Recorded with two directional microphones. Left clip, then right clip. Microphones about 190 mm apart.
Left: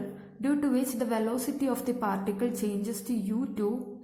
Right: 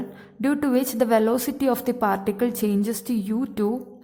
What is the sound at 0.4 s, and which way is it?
A woman's voice, 40° right (ahead or behind).